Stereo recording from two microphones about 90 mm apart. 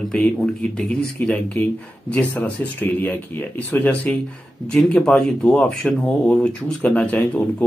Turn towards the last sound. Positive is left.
turn(degrees=15)  # may be behind; listen again after turning